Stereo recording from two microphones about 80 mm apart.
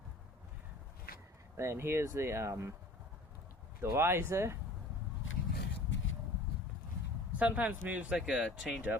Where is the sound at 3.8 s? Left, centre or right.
Right.